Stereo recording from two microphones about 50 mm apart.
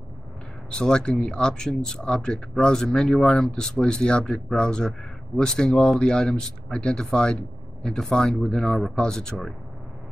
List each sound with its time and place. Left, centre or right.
0.7 s speech: centre